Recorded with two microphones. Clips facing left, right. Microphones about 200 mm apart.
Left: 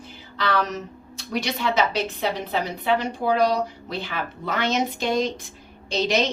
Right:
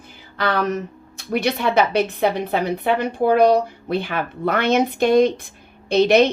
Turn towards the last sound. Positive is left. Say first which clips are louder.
# right 8 dB
turn(degrees=-60)  # may be behind; listen again after turning